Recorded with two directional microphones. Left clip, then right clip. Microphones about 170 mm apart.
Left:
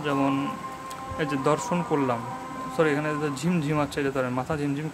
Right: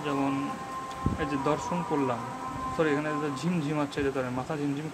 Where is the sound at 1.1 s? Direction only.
25° left (ahead or behind).